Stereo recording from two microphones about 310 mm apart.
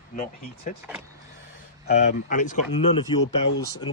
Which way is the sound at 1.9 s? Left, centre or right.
Left.